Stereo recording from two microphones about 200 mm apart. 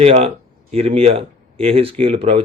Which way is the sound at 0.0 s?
30° right (ahead or behind).